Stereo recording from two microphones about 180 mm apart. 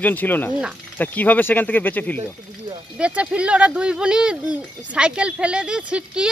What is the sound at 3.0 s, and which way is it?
Speech, 5° right (ahead or behind).